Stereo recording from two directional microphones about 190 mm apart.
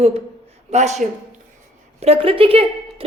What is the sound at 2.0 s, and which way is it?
A woman's voice, 30° right (ahead or behind).